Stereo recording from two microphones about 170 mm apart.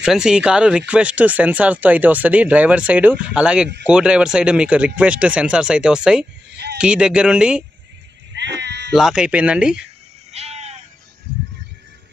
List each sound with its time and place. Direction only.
0.0 s speech: 5° right (ahead or behind)
6.5 s a sound: 75° right (ahead or behind)
6.8 s speech: 5° right (ahead or behind)
8.3 s sheep: 90° right
8.9 s speech: centre (ahead or behind)
10.3 s sheep: 40° right (ahead or behind)